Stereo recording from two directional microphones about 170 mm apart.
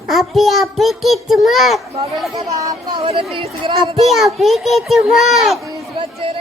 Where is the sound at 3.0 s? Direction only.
30° right (ahead or behind).